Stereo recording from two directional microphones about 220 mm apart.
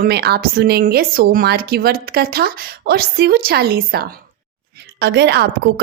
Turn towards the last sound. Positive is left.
turn(degrees=-50)  # may be behind; listen again after turning